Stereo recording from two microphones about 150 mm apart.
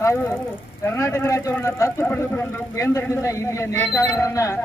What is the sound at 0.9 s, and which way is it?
A man's voice, 20° left (ahead or behind).